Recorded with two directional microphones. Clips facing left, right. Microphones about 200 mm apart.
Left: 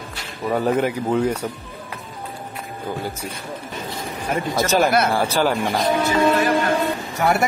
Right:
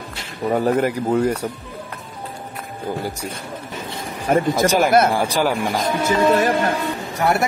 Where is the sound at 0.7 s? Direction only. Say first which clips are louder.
Even; 5° right (ahead or behind).